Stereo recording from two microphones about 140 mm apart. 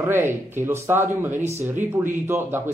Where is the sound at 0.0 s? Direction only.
15° right (ahead or behind).